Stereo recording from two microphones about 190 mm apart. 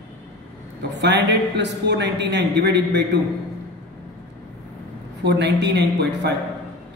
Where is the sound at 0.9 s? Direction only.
65° right (ahead or behind).